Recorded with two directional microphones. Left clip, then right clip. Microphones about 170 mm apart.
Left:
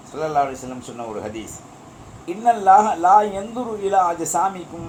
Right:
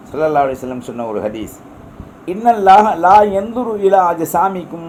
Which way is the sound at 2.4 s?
55° right (ahead or behind).